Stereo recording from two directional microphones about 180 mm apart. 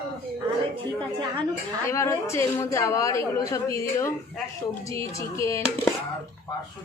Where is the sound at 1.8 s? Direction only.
15° left (ahead or behind).